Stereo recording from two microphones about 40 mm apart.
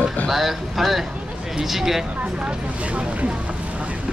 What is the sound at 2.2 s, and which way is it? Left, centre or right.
Speech, right.